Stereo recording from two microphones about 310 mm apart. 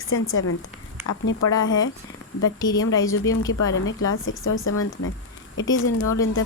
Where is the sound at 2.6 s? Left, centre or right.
Centre.